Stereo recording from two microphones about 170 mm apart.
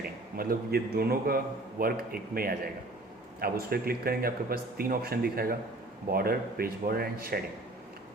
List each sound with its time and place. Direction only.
0.3 s speech: 60° right (ahead or behind)